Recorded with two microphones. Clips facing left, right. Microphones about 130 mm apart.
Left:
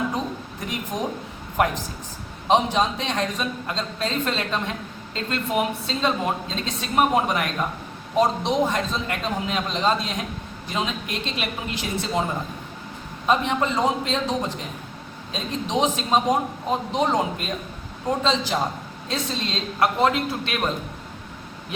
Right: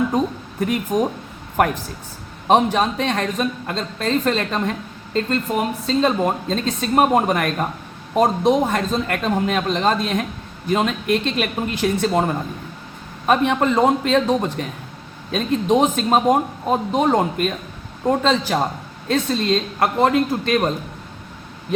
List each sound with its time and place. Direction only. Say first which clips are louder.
0.6 s a man's voice: right 9 dB; 55° right (ahead or behind)
6.0 s a man's voice: right 5 dB; 50° right (ahead or behind)